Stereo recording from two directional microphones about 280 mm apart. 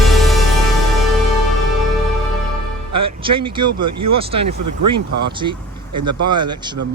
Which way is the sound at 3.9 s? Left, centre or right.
Right.